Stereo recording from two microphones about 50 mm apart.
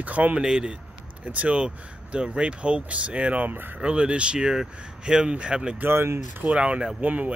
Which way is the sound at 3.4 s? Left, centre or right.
Right.